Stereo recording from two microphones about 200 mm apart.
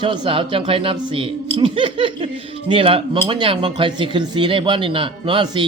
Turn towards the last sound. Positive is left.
turn(degrees=-25)  # may be behind; listen again after turning